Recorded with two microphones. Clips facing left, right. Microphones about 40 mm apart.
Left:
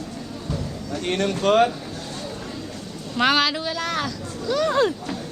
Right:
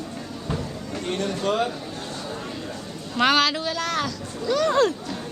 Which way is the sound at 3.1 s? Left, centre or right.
Centre.